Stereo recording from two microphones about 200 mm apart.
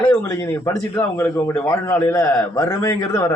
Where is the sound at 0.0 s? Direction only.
10° left (ahead or behind).